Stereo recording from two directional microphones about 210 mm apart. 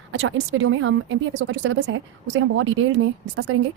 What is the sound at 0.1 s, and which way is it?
A woman's voice, 65° right (ahead or behind).